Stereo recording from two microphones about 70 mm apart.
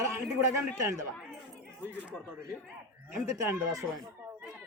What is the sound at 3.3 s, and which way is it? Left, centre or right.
Speech, right.